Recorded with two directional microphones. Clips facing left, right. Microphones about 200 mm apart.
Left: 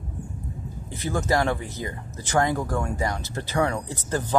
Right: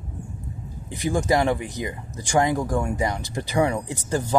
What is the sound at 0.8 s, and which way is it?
Speech, 15° right (ahead or behind).